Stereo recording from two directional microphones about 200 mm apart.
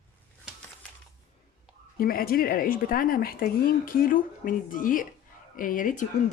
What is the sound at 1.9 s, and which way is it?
Speech, 45° left (ahead or behind).